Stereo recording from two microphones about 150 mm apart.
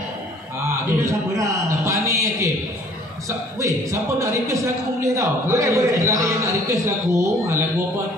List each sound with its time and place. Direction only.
0.9 s a man's voice: 20° right (ahead or behind)